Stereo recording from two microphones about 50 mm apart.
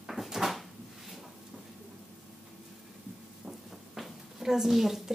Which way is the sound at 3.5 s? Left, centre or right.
Centre.